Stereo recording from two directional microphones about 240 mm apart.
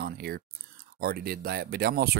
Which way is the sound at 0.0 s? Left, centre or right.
Right.